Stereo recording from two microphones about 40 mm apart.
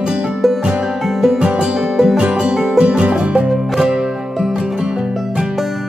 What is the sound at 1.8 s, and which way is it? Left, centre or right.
Music, centre.